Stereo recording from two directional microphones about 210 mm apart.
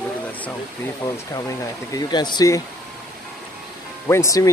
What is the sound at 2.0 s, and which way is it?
Speech, 20° left (ahead or behind).